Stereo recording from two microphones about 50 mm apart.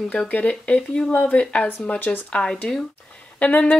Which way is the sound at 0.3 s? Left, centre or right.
Left.